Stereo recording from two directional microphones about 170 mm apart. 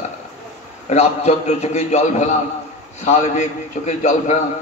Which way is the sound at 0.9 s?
40° left (ahead or behind).